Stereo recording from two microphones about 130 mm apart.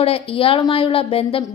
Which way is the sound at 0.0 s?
45° left (ahead or behind).